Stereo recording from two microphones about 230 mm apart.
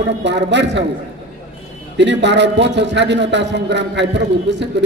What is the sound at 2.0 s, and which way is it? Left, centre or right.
A man's voice, right.